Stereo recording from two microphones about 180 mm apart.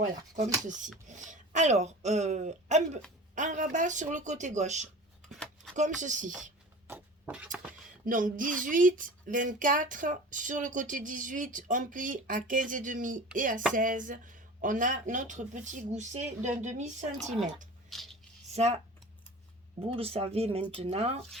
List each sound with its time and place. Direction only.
0.0 s speech: 45° right (ahead or behind)
5.3 s scissors: 5° left (ahead or behind)
5.7 s speech: 45° right (ahead or behind)
6.8 s a sound: 10° right (ahead or behind)
8.0 s speech: 50° right (ahead or behind)
17.8 s a sound: centre (ahead or behind)
18.5 s speech: 35° right (ahead or behind)
20.0 s speech: 35° right (ahead or behind)